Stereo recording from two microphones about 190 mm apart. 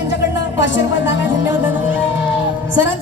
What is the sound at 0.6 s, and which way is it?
Speech, 70° left (ahead or behind).